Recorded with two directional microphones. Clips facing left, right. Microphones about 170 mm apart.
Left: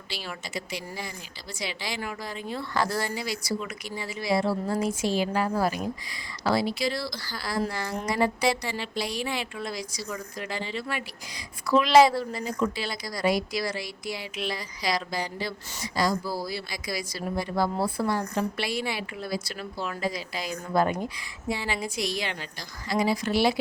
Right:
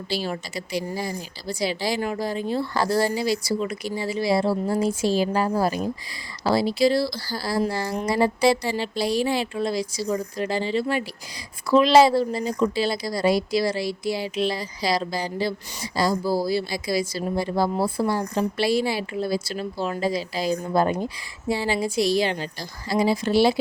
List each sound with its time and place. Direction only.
0.1 s speech: 35° right (ahead or behind)